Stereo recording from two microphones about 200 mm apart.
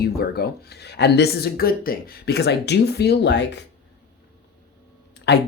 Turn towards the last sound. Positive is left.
turn(degrees=60)  # may be behind; listen again after turning